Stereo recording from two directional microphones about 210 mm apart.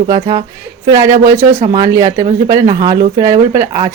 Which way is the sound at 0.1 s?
20° right (ahead or behind).